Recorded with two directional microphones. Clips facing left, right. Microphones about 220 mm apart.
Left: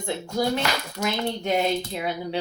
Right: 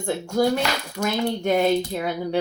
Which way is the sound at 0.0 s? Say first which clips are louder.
Right 4 dB; 50° right (ahead or behind).